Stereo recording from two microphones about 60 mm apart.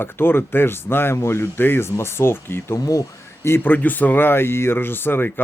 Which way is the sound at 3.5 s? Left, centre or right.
Left.